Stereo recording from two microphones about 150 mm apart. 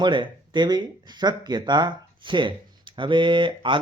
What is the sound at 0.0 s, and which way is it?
Speech, 30° right (ahead or behind).